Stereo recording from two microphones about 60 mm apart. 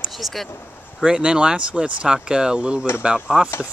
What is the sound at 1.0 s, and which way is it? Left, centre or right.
Speech, centre.